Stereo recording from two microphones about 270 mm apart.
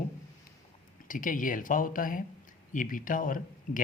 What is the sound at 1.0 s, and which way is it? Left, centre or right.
Speech, left.